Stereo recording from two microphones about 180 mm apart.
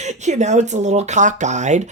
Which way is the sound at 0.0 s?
40° right (ahead or behind).